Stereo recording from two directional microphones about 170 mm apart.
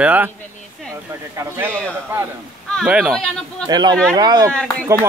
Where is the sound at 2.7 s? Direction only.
5° right (ahead or behind).